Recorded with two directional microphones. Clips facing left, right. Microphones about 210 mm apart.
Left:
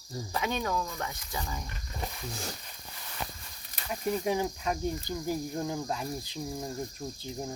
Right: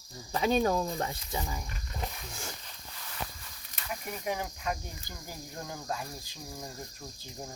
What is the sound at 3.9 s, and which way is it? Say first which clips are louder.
Speech: left 6 dB; 30° left (ahead or behind).